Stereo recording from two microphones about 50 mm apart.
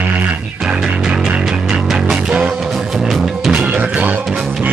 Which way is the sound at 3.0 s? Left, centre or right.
Centre.